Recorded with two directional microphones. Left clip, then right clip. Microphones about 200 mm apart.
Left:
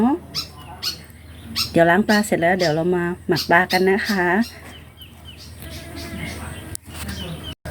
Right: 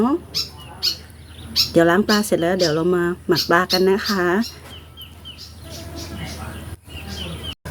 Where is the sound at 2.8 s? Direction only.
60° right (ahead or behind).